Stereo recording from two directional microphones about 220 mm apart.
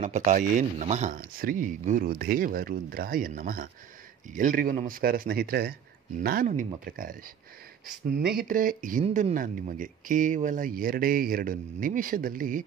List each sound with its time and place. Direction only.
0.0 s speech: 35° right (ahead or behind)